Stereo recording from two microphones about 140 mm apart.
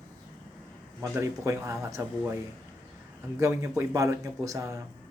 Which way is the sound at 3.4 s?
20° right (ahead or behind).